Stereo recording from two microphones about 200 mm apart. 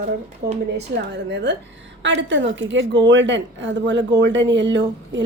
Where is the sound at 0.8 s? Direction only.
60° right (ahead or behind).